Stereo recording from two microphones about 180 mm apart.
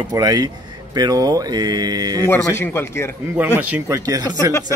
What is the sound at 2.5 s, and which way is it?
Speech, 15° left (ahead or behind).